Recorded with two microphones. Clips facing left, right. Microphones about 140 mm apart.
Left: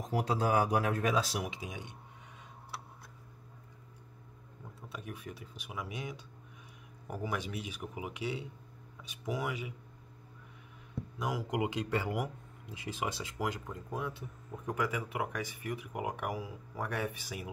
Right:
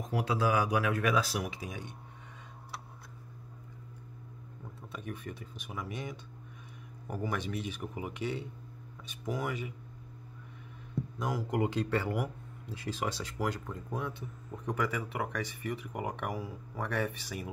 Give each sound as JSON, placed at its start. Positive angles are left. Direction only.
{"t": 0.1, "sound": "speech", "side_deg": 35}
{"t": 4.9, "sound": "speech", "side_deg": 10}
{"t": 11.1, "sound": "speech", "side_deg": 10}